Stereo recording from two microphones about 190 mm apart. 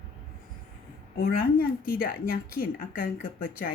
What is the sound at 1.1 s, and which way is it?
Speech, 55° left (ahead or behind).